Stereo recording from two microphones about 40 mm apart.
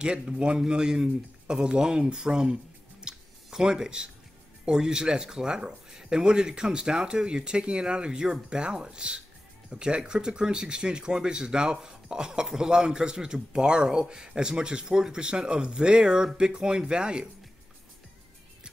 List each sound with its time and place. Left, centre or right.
0.0 s a man's voice: right